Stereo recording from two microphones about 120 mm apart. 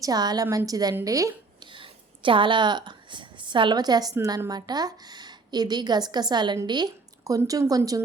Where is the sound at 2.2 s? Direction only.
45° right (ahead or behind).